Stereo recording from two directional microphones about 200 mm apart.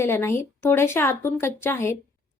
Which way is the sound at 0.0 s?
10° left (ahead or behind).